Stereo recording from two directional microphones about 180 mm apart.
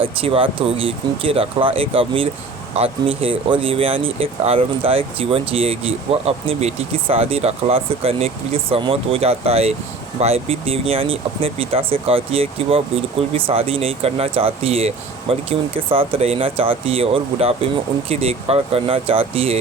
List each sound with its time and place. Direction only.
0.0 s speech: 30° right (ahead or behind)